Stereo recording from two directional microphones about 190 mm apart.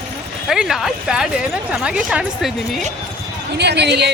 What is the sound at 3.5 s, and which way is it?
Speech, 60° right (ahead or behind).